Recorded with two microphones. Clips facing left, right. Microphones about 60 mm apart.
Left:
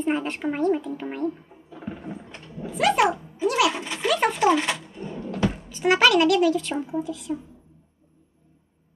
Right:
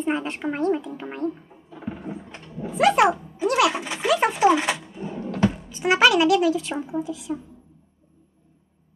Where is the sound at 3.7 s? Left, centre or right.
Centre.